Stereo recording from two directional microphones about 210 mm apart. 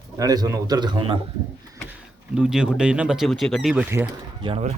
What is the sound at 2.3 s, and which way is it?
Speech, 5° right (ahead or behind).